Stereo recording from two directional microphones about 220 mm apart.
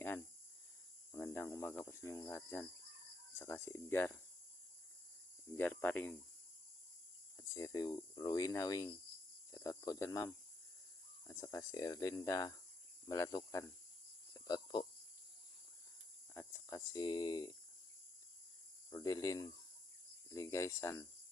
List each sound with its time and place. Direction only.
1.1 s speech: 10° left (ahead or behind)
5.5 s speech: 10° left (ahead or behind)
7.3 s speech: 15° left (ahead or behind)
14.3 s a sound: 20° left (ahead or behind)
16.3 s speech: 10° left (ahead or behind)
18.9 s speech: 15° left (ahead or behind)